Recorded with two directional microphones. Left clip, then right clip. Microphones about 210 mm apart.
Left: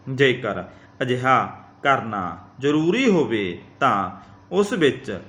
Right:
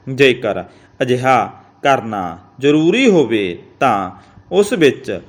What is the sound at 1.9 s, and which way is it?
A man's voice, 25° right (ahead or behind).